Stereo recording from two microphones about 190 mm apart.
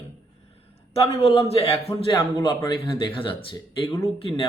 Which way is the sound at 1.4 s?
30° left (ahead or behind).